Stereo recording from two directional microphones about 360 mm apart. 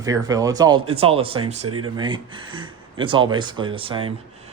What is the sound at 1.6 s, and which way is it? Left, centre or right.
Speech, right.